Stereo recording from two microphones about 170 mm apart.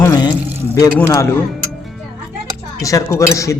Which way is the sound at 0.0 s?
20° left (ahead or behind).